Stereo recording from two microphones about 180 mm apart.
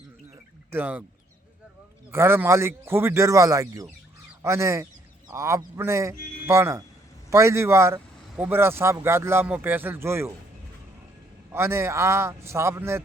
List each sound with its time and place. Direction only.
0.7 s speech: 10° right (ahead or behind)
2.1 s speech: 10° right (ahead or behind)
11.5 s speech: 15° right (ahead or behind)